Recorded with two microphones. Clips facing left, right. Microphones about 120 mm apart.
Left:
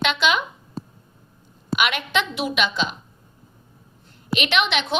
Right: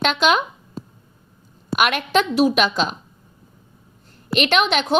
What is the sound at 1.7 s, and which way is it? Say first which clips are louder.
A woman's voice: right 4 dB; 45° right (ahead or behind).